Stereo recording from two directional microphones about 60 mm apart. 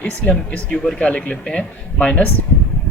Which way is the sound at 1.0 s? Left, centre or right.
Centre.